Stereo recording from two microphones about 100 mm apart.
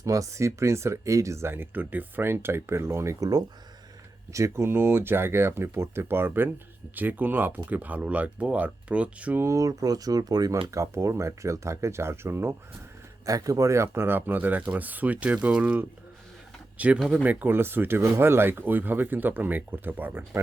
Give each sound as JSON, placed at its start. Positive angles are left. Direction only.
{"t": 0.0, "sound": "speech", "side_deg": -35}
{"t": 9.4, "sound": "speech", "side_deg": -30}
{"t": 13.2, "sound": "speech", "side_deg": -35}